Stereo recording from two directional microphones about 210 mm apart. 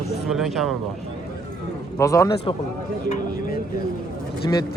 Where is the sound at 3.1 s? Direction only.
40° left (ahead or behind).